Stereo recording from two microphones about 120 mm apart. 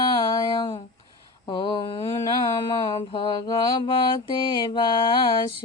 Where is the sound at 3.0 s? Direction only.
40° left (ahead or behind).